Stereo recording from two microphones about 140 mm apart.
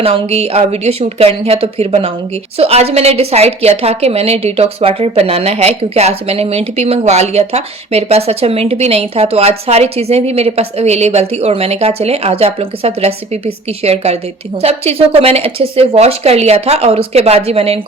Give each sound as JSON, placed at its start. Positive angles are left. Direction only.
{"t": 0.0, "sound": "a woman's voice", "side_deg": -45}